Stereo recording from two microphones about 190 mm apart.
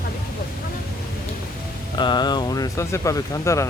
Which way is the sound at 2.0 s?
25° left (ahead or behind).